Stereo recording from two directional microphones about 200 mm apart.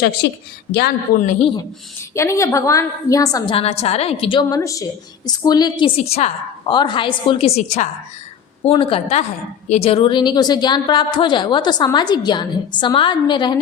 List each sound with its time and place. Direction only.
0.2 s a woman's voice: 55° left (ahead or behind)
1.2 s a woman's voice: 35° left (ahead or behind)
2.1 s a woman's voice: 15° left (ahead or behind)
3.5 s a woman's voice: 30° left (ahead or behind)